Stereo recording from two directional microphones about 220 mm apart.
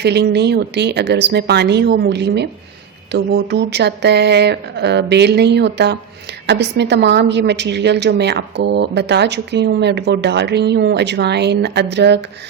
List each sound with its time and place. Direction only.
0.0 s a woman's voice: 50° right (ahead or behind)